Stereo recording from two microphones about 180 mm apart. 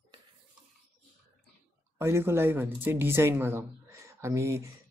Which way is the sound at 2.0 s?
15° right (ahead or behind).